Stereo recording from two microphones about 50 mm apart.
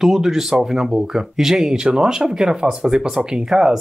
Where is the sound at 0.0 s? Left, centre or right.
Centre.